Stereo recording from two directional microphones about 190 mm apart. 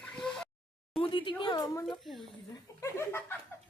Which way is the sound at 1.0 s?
25° left (ahead or behind).